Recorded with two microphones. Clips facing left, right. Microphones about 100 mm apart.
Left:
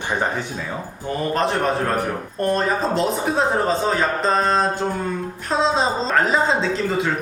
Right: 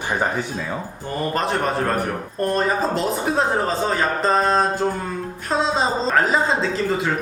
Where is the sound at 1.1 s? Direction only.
Centre (ahead or behind).